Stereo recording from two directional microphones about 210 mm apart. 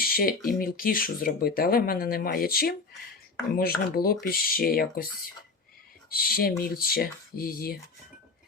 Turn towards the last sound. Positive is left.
turn(degrees=45)  # may be behind; listen again after turning